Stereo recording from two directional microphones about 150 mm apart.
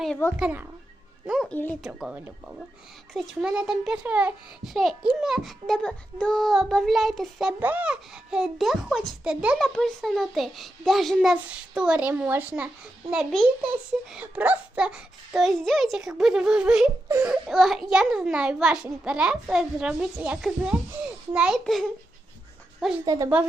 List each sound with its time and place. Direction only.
0.3 s speech: 10° right (ahead or behind)
1.3 s speech: 5° left (ahead or behind)
1.9 s a child's voice: 10° right (ahead or behind)
23.0 s a woman's voice: 20° right (ahead or behind)